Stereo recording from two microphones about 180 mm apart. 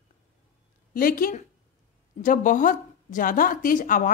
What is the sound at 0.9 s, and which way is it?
A woman's voice, 50° left (ahead or behind).